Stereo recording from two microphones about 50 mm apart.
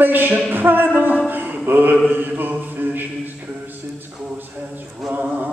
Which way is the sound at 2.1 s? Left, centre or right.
Right.